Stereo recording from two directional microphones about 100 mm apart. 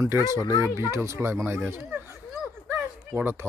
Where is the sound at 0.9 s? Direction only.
30° right (ahead or behind).